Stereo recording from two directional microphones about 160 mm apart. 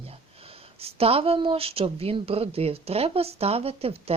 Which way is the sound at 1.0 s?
40° right (ahead or behind).